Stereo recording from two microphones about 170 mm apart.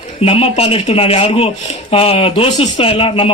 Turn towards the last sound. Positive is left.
turn(degrees=35)  # may be behind; listen again after turning